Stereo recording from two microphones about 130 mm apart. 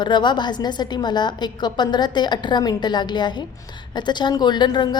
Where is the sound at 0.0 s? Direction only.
35° left (ahead or behind).